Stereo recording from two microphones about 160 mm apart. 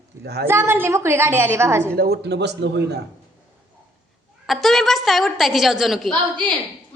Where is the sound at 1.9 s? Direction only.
75° right (ahead or behind); by 2.8 s 90° right.